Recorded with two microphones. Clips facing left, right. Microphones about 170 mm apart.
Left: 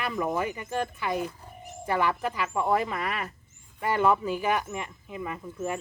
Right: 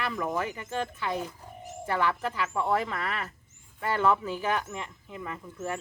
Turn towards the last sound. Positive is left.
turn(degrees=15)  # may be behind; listen again after turning